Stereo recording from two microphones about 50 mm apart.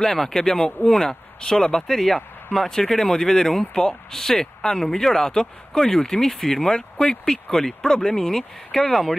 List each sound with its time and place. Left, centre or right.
0.0 s speech: centre